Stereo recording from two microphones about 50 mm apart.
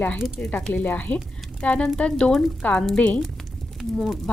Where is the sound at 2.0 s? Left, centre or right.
Centre.